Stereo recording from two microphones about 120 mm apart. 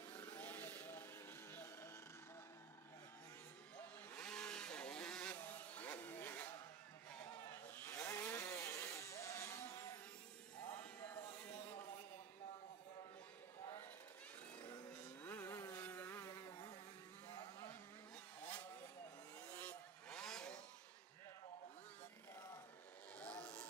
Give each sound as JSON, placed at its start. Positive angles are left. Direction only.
{"t": 0.1, "sound": "a sound", "side_deg": 10}
{"t": 1.5, "sound": "music", "side_deg": 20}
{"t": 4.1, "sound": "vehicle", "side_deg": 5}
{"t": 5.3, "sound": "a sound", "side_deg": 15}
{"t": 7.7, "sound": "chainsaw", "side_deg": 20}
{"t": 8.5, "sound": "vehicle", "side_deg": 25}
{"t": 10.8, "sound": "music", "side_deg": 15}
{"t": 11.5, "sound": "a sound", "side_deg": 70}
{"t": 15.2, "sound": "vehicle", "side_deg": 20}
{"t": 15.8, "sound": "insect", "side_deg": 15}
{"t": 17.3, "sound": "insect", "side_deg": 30}
{"t": 18.4, "sound": "chainsaw", "side_deg": 10}
{"t": 19.4, "sound": "vehicle", "side_deg": 10}
{"t": 23.1, "sound": "vehicle", "side_deg": 10}